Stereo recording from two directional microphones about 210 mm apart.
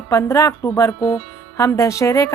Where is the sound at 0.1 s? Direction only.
15° left (ahead or behind).